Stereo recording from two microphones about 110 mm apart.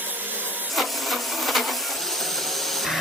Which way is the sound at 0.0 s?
15° right (ahead or behind).